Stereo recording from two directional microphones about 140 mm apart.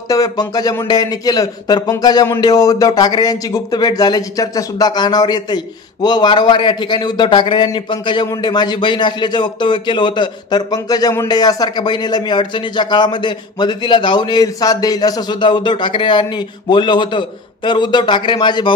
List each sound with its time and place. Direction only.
0.1 s a man's voice: 25° left (ahead or behind)